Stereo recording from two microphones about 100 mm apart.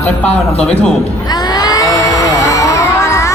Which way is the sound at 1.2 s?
40° left (ahead or behind).